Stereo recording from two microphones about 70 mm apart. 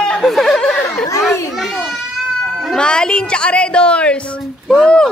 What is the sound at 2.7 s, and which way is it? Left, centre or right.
A woman's voice, centre.